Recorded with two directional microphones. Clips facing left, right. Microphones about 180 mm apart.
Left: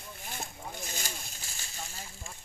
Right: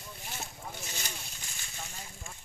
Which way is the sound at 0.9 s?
35° left (ahead or behind).